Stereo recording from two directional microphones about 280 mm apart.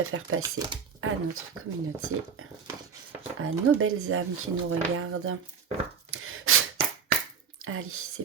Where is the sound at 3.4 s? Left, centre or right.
Right.